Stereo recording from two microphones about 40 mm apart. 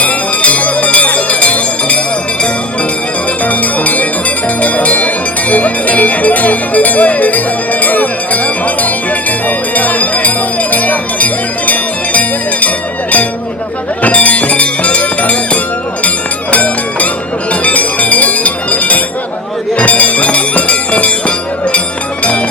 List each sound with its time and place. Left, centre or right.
0.0 s bell: left
3.4 s music: left
17.5 s bell: left
22.2 s music: left